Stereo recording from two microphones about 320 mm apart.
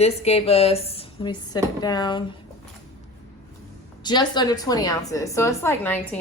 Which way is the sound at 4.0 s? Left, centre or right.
Centre.